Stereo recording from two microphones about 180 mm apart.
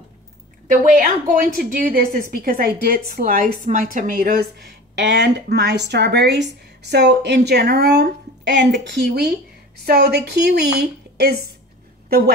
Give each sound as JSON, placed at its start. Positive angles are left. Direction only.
{"t": 0.7, "sound": "a woman's voice", "side_deg": -45}